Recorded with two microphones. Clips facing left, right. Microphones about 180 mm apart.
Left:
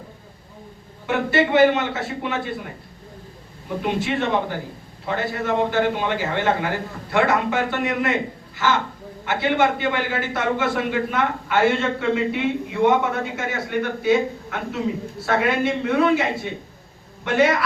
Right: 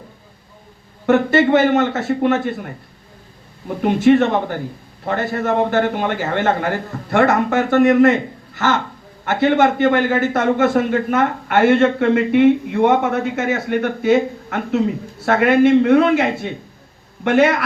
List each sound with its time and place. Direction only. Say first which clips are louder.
1.0 s a man's voice: right 7 dB; 50° right (ahead or behind)
3.8 s a man's voice: right 10 dB; 50° right (ahead or behind)
9.2 s a man's voice: right 5 dB; 50° right (ahead or behind)